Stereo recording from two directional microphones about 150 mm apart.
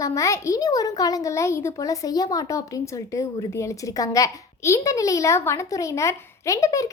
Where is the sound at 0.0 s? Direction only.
20° left (ahead or behind).